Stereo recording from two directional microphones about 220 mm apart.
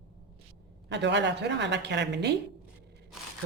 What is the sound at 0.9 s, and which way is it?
A woman's voice, 50° right (ahead or behind).